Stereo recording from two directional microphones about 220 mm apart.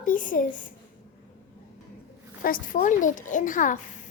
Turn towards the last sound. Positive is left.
turn(degrees=35)  # may be behind; listen again after turning